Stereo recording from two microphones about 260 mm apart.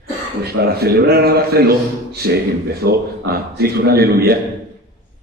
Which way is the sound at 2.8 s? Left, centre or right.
Right.